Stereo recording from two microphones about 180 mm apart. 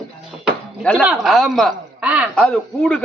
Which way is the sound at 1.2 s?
Centre (ahead or behind).